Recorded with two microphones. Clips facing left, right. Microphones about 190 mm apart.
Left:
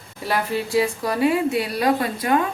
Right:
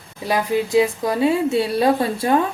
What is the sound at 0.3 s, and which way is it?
Speech, 20° right (ahead or behind).